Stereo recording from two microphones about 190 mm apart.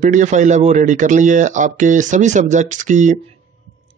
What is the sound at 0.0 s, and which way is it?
Speech, 40° right (ahead or behind).